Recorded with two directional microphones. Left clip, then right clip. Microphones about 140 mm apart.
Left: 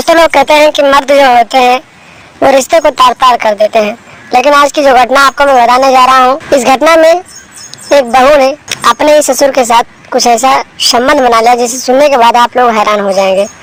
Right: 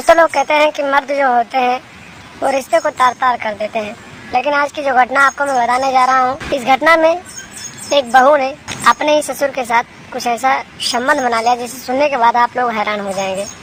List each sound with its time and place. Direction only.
0.0 s speech: 50° left (ahead or behind)
8.4 s speech: 45° left (ahead or behind)